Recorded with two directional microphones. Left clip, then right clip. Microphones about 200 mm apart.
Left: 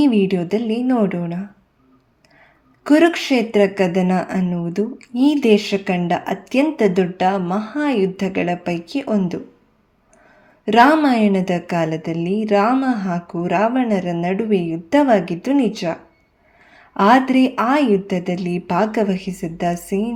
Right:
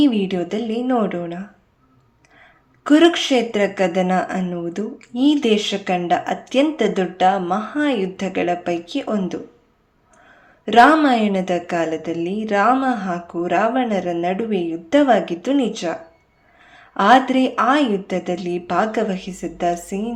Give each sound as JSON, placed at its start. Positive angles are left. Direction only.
{"t": 0.0, "sound": "speech", "side_deg": 35}
{"t": 2.8, "sound": "speech", "side_deg": 35}
{"t": 10.7, "sound": "speech", "side_deg": 35}